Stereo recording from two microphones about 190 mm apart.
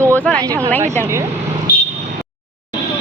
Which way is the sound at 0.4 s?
15° right (ahead or behind).